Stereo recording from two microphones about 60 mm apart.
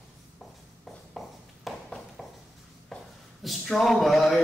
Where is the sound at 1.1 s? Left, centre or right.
Centre.